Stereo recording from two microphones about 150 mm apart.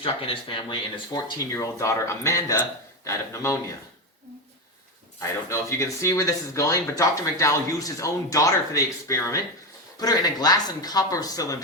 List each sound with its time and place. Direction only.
0.0 s speech: 35° left (ahead or behind)
1.5 s speech: 20° left (ahead or behind)
5.2 s speech: 20° left (ahead or behind)